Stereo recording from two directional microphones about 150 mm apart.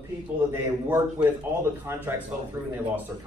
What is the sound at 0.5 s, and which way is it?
A man's voice, 15° right (ahead or behind).